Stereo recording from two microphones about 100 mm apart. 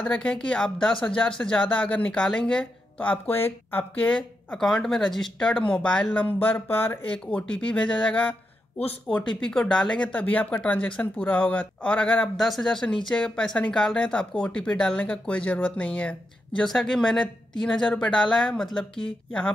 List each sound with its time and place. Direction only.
0.0 s speech: 10° left (ahead or behind)
4.1 s speech: 5° left (ahead or behind)
12.4 s speech: centre (ahead or behind)